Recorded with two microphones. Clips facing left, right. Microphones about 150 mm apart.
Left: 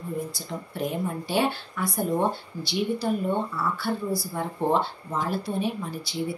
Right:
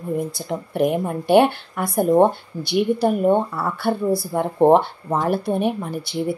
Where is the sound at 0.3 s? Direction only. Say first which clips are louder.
Right 8 dB; 60° right (ahead or behind).